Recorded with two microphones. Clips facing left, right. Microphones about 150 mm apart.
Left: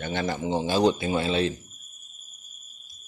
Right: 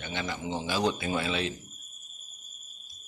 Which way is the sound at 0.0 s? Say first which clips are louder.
Left 6 dB; 40° left (ahead or behind).